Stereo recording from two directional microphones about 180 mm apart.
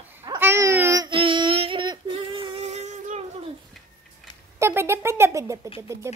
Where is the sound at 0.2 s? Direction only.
15° right (ahead or behind); by 3.3 s 40° right (ahead or behind).